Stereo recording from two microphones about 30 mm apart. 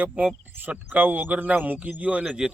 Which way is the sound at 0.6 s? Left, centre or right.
Right.